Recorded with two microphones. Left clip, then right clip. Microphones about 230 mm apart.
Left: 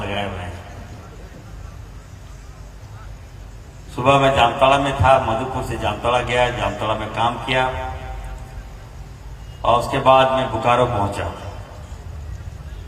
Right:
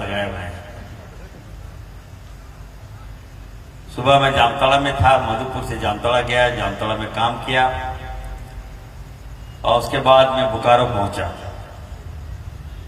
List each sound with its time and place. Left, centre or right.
0.0 s a sound: right
3.9 s a man's voice: right
9.6 s a man's voice: right